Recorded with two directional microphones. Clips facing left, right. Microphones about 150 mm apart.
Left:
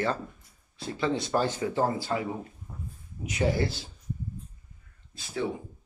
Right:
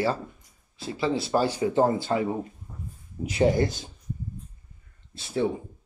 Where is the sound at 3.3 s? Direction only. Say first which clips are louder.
Right 5 dB; 25° right (ahead or behind).